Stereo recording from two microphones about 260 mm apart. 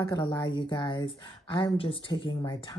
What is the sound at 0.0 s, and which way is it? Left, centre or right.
A woman's voice, centre.